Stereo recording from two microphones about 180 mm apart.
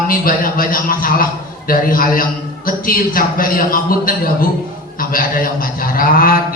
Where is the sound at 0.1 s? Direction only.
50° left (ahead or behind).